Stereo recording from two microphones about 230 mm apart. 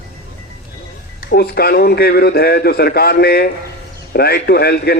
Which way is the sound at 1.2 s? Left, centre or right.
Left.